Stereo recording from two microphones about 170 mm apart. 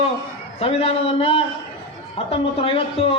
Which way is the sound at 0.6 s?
35° left (ahead or behind).